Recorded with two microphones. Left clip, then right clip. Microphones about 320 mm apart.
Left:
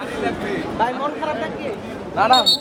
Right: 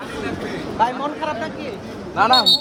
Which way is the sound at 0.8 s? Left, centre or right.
Right.